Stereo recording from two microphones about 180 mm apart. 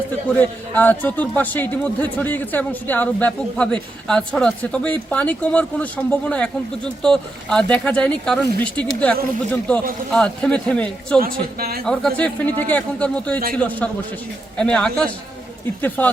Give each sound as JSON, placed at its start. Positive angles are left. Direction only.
{"t": 0.3, "sound": "a man's voice", "side_deg": 10}
{"t": 11.2, "sound": "speech", "side_deg": -55}
{"t": 11.9, "sound": "a man's voice", "side_deg": 5}